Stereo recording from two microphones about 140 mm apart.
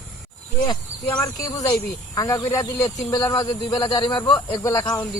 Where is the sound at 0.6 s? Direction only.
30° left (ahead or behind).